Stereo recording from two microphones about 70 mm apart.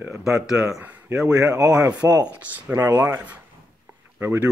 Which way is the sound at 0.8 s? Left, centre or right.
Right.